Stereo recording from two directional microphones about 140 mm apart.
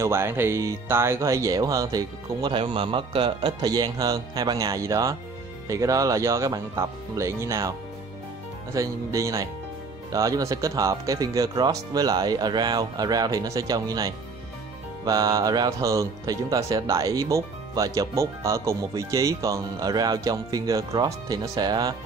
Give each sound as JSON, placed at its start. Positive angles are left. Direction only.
{"t": 0.0, "sound": "speech", "side_deg": -20}
{"t": 8.7, "sound": "speech", "side_deg": -20}